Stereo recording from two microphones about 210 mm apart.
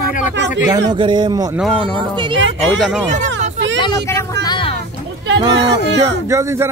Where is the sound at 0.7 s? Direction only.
20° right (ahead or behind).